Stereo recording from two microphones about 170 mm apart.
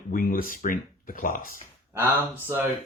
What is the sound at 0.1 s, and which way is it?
Speech, 55° left (ahead or behind).